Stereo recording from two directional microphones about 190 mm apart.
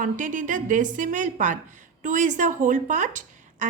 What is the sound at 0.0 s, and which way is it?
A woman's voice, 45° right (ahead or behind).